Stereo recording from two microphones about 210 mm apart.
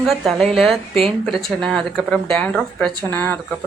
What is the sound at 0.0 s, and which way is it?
A woman's voice, centre (ahead or behind).